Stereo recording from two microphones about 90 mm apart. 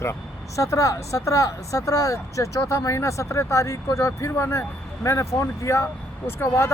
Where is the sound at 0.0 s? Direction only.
35° left (ahead or behind).